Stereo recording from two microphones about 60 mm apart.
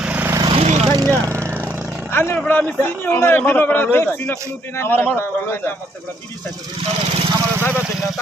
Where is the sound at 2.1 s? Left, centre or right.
Left.